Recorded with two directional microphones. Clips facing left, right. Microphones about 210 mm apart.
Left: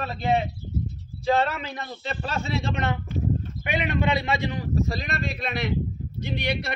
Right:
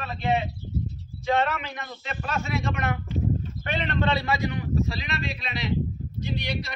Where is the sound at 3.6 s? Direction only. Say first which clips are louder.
Left 2 dB; 10° left (ahead or behind).